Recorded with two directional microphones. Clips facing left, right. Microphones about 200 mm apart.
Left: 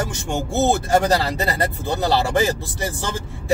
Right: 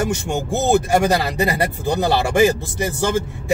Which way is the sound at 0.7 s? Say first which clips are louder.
Right 3 dB; 15° right (ahead or behind).